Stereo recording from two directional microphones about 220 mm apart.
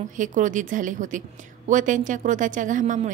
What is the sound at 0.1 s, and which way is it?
A woman's voice, 35° right (ahead or behind).